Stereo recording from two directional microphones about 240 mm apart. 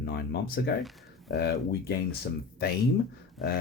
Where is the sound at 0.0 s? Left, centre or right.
Left.